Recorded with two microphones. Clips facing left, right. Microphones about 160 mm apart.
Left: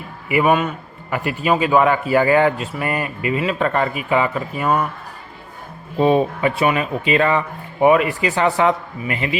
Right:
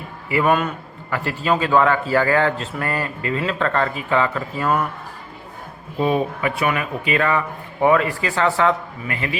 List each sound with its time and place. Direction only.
0.3 s a man's voice: 15° left (ahead or behind)
6.0 s speech: 30° left (ahead or behind)